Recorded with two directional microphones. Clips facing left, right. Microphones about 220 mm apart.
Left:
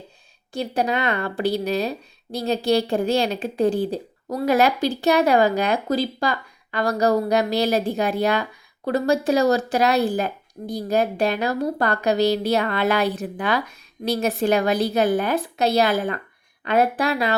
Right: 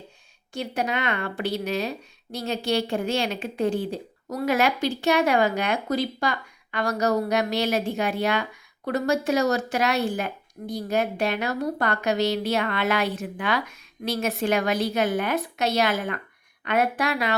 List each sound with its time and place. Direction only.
0.5 s speech: 35° left (ahead or behind)